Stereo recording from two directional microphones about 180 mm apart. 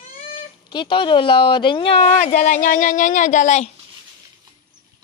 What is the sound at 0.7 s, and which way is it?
Speech, 25° left (ahead or behind).